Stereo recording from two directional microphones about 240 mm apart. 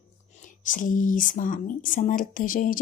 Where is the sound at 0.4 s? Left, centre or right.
Left.